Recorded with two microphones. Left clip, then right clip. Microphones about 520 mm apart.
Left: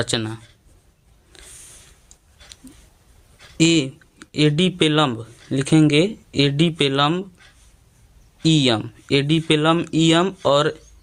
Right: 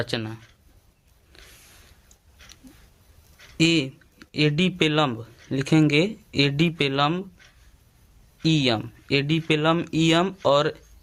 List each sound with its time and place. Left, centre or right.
0.0 s speech: right
1.3 s a sound: right
3.6 s speech: right
8.4 s speech: right